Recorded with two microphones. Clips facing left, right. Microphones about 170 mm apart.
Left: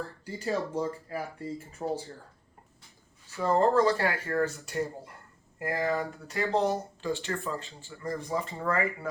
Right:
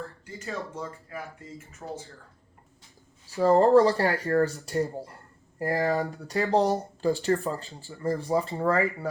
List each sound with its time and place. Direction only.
0.3 s speech: 35° left (ahead or behind)
3.2 s speech: 35° right (ahead or behind)